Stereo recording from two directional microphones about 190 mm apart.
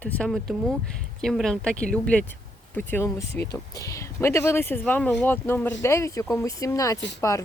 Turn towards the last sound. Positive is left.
turn(degrees=15)  # may be behind; listen again after turning